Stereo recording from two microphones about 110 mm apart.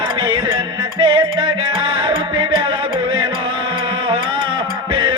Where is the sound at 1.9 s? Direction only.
50° right (ahead or behind).